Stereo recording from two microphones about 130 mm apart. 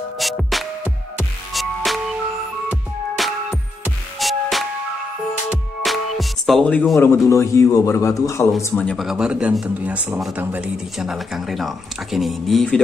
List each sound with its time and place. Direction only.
0.2 s music: centre (ahead or behind)
3.2 s music: centre (ahead or behind)
5.9 s music: centre (ahead or behind)
7.0 s a man's voice: 20° left (ahead or behind)
8.7 s speech: 5° left (ahead or behind)